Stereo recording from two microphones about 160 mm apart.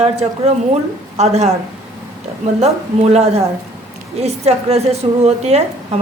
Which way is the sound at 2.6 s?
40° right (ahead or behind).